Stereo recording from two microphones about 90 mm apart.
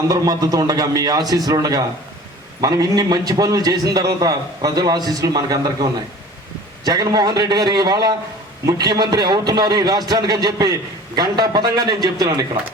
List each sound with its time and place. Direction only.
0.1 s a man's voice: 45° right (ahead or behind)